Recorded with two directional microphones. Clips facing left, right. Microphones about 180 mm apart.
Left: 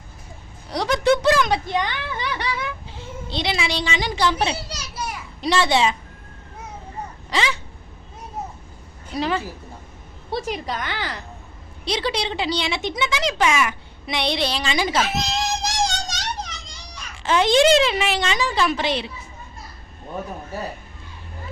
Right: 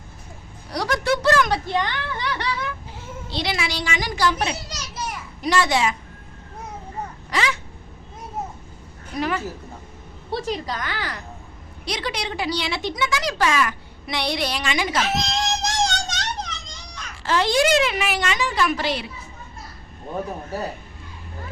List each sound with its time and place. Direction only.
0.7 s a woman's voice: 20° left (ahead or behind)
4.7 s children playing: 10° left (ahead or behind)
5.4 s speech: 30° left (ahead or behind)
7.3 s a sound: 30° left (ahead or behind)
9.1 s speech: 30° left (ahead or behind)
10.3 s speech: 15° left (ahead or behind); by 15.0 s 30° left (ahead or behind)
15.0 s whimper: 5° left (ahead or behind)
17.2 s speech: 20° left (ahead or behind)